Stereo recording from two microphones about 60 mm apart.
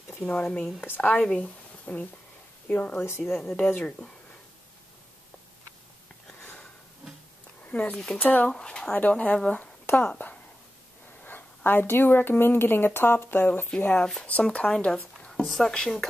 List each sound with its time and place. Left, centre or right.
0.1 s speech: centre
0.7 s speech: left
1.1 s speech: centre
1.9 s speech: left
3.3 s a woman's voice: centre
3.6 s speech: left
6.4 s sniff: left
7.6 s speech: left
8.2 s speech: left
8.5 s speech: centre
8.9 s a woman's voice: left
13.7 s speech: centre